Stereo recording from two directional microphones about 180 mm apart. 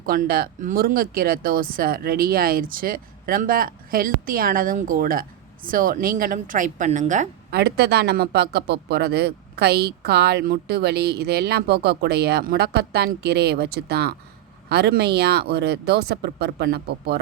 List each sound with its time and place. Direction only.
0.0 s speech: 55° right (ahead or behind)
7.5 s speech: 65° right (ahead or behind)